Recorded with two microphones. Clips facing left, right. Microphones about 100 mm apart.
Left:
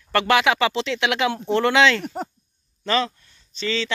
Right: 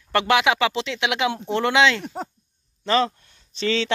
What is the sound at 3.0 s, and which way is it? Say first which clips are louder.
Speech: right 4 dB; 50° right (ahead or behind).